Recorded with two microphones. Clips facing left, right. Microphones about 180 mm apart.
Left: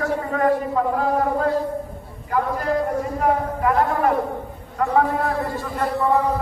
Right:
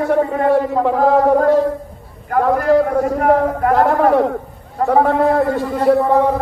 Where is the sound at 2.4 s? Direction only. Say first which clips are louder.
Right 13 dB; 70° right (ahead or behind); by 3.7 s 55° right (ahead or behind).